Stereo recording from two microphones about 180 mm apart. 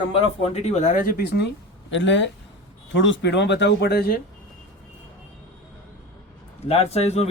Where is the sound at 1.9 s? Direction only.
90° left; by 4.2 s 65° left (ahead or behind).